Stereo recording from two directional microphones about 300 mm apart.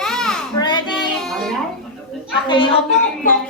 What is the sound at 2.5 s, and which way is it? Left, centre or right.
Speech, centre.